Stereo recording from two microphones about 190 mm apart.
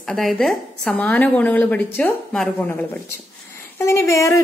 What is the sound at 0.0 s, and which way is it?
A woman's voice, centre (ahead or behind).